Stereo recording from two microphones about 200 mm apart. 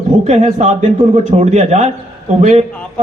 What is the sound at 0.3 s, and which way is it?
A man's voice, 30° right (ahead or behind).